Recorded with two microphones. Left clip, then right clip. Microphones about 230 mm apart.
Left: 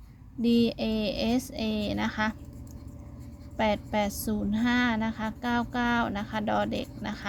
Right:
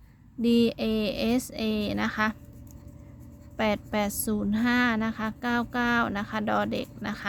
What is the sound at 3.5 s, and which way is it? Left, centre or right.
A woman's voice, centre.